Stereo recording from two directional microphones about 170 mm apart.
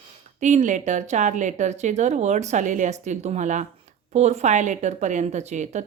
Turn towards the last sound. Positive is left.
turn(degrees=-45)  # may be behind; listen again after turning